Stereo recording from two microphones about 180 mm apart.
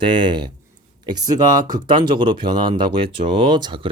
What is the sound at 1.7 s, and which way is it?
Speech, 25° right (ahead or behind).